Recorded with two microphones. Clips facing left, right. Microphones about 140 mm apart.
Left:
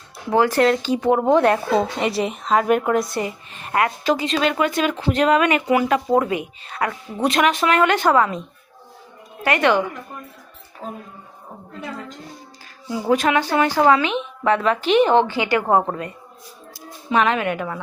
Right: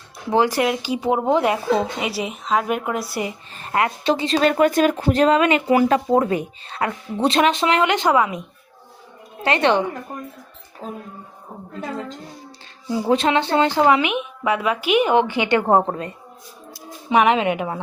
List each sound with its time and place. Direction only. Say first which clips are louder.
0.3 s a woman's voice: left 2 dB; 15° right (ahead or behind)
3.5 s a sound: even; 35° right (ahead or behind)
3.8 s speech: even; 25° right (ahead or behind)
9.4 s speech: even; 25° right (ahead or behind)
12.9 s a woman's voice: even; 25° right (ahead or behind)